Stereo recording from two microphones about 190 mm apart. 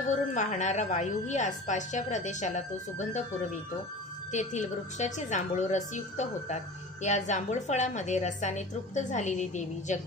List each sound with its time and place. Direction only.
0.3 s a woman's voice: 40° left (ahead or behind)
4.3 s a woman's voice: 40° left (ahead or behind)